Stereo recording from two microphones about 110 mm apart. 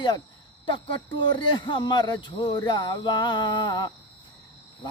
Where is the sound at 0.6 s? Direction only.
45° left (ahead or behind).